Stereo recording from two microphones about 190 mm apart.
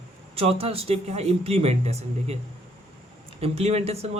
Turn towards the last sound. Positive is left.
turn(degrees=-35)  # may be behind; listen again after turning